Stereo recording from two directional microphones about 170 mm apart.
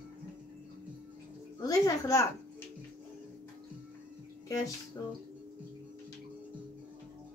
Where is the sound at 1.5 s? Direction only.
20° left (ahead or behind).